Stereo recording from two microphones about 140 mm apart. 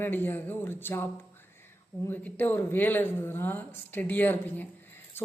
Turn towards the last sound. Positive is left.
turn(degrees=15)  # may be behind; listen again after turning